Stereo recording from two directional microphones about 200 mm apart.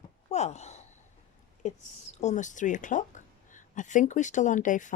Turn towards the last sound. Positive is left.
turn(degrees=40)  # may be behind; listen again after turning